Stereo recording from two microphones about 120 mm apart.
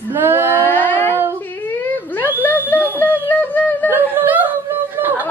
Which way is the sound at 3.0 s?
15° left (ahead or behind).